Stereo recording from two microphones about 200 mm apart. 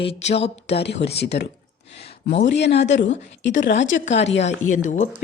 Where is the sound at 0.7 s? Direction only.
55° left (ahead or behind).